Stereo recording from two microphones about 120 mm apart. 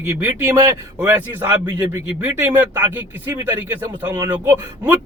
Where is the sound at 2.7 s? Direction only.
15° right (ahead or behind).